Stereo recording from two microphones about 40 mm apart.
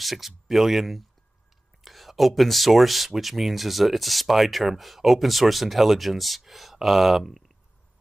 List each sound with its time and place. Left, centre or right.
0.0 s speech: centre